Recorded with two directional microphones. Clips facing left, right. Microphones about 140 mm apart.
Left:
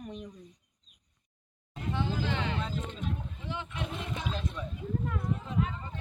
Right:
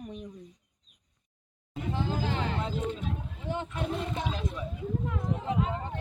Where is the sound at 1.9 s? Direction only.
40° right (ahead or behind).